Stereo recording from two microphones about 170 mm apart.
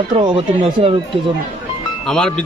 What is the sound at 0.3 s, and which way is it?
Speech, 30° right (ahead or behind).